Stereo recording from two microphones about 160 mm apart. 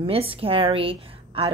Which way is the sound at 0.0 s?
35° right (ahead or behind).